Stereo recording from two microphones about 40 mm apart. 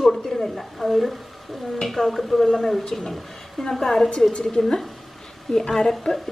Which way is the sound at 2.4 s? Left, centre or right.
Centre.